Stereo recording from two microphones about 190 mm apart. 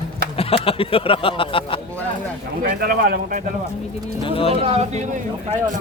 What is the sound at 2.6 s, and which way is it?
Speech, 50° right (ahead or behind).